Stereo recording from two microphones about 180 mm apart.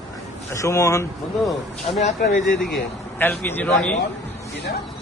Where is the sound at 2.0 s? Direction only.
45° left (ahead or behind).